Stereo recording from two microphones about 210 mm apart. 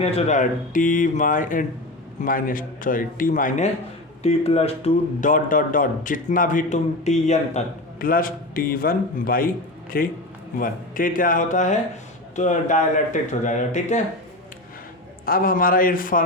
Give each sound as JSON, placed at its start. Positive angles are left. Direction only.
{"t": 0.0, "sound": "a man's voice", "side_deg": 35}
{"t": 15.3, "sound": "speech", "side_deg": 40}